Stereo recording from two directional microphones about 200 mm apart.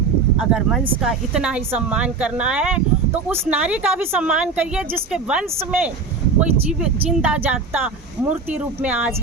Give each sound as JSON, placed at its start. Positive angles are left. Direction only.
{"t": 0.3, "sound": "a woman's voice", "side_deg": -5}